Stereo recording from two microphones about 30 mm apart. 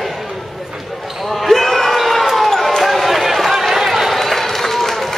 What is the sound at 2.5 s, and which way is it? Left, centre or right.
Run, centre.